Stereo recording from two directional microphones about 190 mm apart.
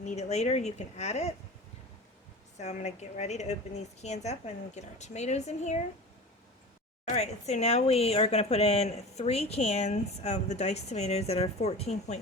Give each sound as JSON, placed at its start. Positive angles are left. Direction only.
{"t": 0.0, "sound": "speech", "side_deg": 35}
{"t": 2.6, "sound": "speech", "side_deg": 35}
{"t": 7.0, "sound": "speech", "side_deg": 35}